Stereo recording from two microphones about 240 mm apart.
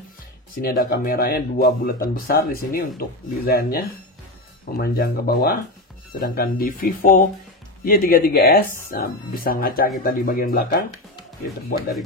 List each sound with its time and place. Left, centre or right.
0.6 s speech: left